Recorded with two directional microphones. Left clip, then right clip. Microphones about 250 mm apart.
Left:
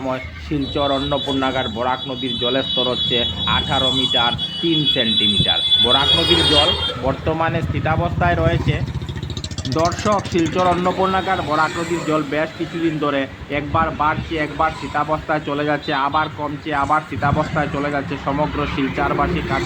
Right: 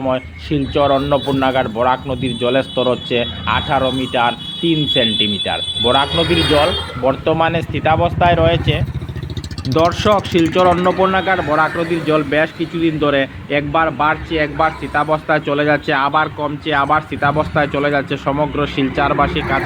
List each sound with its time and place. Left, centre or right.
0.0 s speech: right